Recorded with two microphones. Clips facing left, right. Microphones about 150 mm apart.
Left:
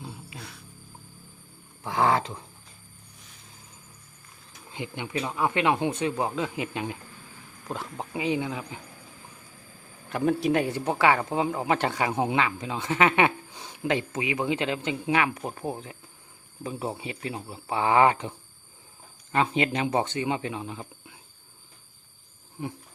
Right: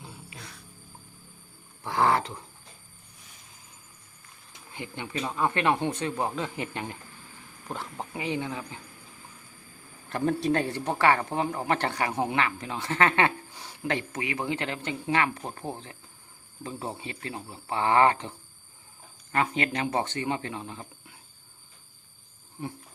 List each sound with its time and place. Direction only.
1.8 s speech: 15° left (ahead or behind)
4.7 s speech: 15° left (ahead or behind)
10.1 s speech: 10° left (ahead or behind)